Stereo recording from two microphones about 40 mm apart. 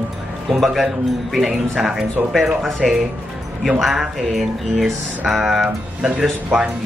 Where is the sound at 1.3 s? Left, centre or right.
Centre.